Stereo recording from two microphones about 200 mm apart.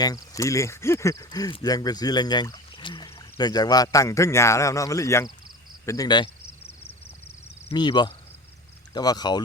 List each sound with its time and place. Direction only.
0.0 s speech: 15° left (ahead or behind)
7.7 s speech: 20° left (ahead or behind)